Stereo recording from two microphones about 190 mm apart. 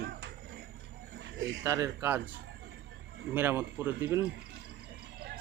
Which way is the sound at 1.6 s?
15° right (ahead or behind).